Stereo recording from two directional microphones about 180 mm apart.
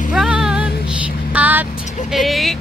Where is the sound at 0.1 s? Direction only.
5° right (ahead or behind).